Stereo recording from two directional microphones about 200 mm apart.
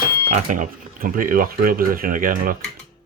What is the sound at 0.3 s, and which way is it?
Speech, 40° right (ahead or behind).